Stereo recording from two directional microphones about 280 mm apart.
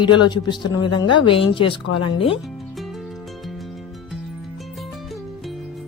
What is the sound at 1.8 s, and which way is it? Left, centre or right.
Speech, left.